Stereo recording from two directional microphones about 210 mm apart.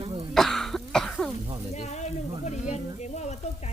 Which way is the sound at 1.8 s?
35° left (ahead or behind).